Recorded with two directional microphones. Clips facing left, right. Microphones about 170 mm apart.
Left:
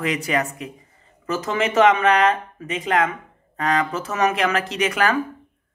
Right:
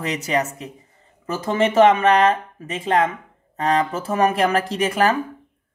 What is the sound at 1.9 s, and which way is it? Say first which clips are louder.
Speech: right 2 dB; 45° right (ahead or behind).